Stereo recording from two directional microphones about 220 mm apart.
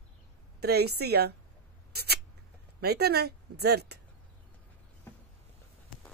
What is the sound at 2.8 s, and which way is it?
Speech, 45° right (ahead or behind).